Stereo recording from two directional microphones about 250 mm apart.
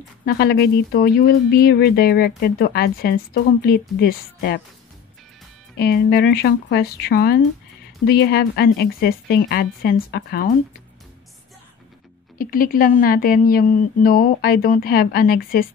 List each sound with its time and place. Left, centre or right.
0.2 s speech: left
5.8 s speech: left
12.4 s speech: left